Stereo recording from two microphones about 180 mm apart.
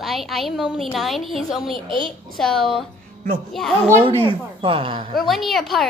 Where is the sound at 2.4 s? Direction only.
Centre (ahead or behind).